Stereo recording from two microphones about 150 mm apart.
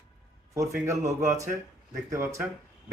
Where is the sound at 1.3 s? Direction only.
20° right (ahead or behind).